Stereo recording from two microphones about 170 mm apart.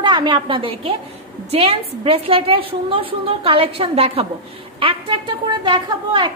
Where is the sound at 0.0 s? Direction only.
25° right (ahead or behind).